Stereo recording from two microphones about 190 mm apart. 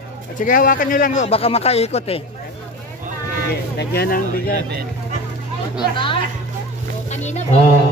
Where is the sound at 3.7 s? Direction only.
55° left (ahead or behind).